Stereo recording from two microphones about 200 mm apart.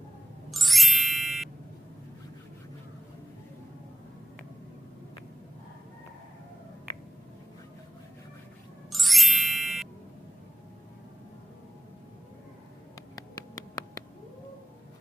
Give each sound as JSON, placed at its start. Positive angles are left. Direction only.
{"t": 0.5, "sound": "music", "side_deg": 0}
{"t": 8.9, "sound": "music", "side_deg": 0}
{"t": 12.9, "sound": "a sound", "side_deg": 20}